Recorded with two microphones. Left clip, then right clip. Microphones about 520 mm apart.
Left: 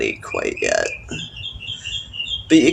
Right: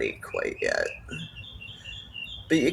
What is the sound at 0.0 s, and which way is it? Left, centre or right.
Speech, right.